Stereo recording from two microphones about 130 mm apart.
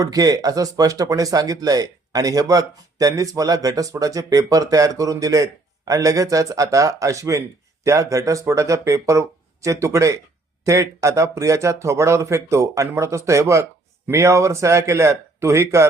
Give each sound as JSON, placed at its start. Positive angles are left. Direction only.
{"t": 0.0, "sound": "speech", "side_deg": -30}